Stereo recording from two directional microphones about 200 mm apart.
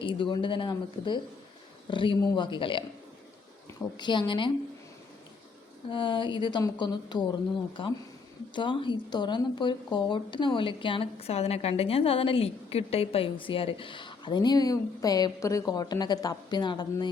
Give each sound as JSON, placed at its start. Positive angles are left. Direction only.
{"t": 0.0, "sound": "speech", "side_deg": 25}
{"t": 3.9, "sound": "speech", "side_deg": 25}
{"t": 5.9, "sound": "speech", "side_deg": 25}